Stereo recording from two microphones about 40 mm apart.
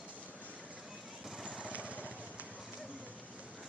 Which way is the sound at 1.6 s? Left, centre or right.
Right.